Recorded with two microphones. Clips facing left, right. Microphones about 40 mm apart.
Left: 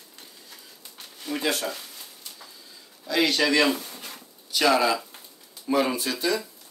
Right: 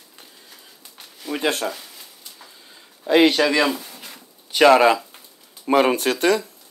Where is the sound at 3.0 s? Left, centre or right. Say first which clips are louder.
Right 8 dB; right.